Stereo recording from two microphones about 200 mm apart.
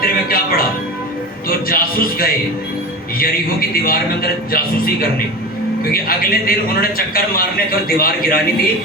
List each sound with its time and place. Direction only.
0.0 s music: 45° left (ahead or behind)
1.5 s a man's voice: 45° left (ahead or behind)